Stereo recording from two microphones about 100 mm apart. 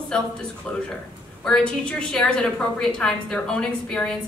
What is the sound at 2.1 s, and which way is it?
A woman's voice, 10° left (ahead or behind).